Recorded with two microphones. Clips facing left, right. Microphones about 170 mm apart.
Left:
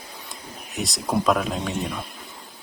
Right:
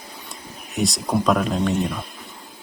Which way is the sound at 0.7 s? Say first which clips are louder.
Right 4 dB; centre (ahead or behind).